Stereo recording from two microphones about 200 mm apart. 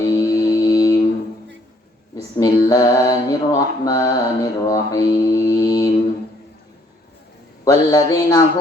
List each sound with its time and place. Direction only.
0.0 s music: 15° left (ahead or behind)
2.4 s mantra: 20° left (ahead or behind)
7.6 s mantra: 15° left (ahead or behind)